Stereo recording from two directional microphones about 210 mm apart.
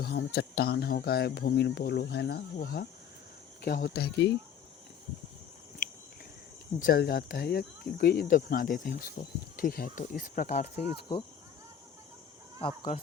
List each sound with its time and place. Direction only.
0.0 s speech: 50° left (ahead or behind)
6.7 s speech: 45° left (ahead or behind)